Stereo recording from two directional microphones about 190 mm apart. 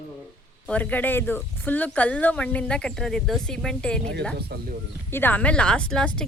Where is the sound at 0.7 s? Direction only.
10° left (ahead or behind).